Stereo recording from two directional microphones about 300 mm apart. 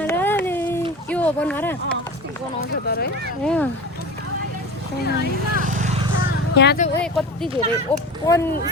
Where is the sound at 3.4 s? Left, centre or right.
Centre.